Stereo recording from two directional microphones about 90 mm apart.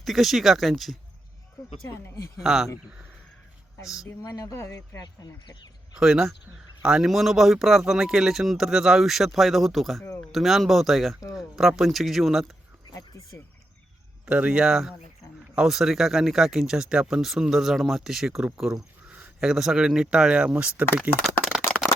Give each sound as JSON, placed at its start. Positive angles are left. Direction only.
{"t": 0.0, "sound": "speech", "side_deg": 0}
{"t": 2.4, "sound": "speech", "side_deg": -5}
{"t": 4.0, "sound": "speech", "side_deg": 40}
{"t": 5.0, "sound": "speech", "side_deg": 55}
{"t": 6.0, "sound": "speech", "side_deg": -5}
{"t": 13.0, "sound": "a sound", "side_deg": 35}
{"t": 14.3, "sound": "speech", "side_deg": -10}